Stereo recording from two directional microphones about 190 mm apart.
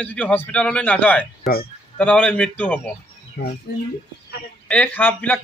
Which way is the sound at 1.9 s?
5° left (ahead or behind).